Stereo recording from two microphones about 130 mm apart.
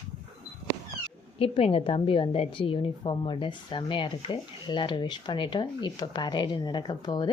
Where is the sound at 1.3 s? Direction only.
45° left (ahead or behind).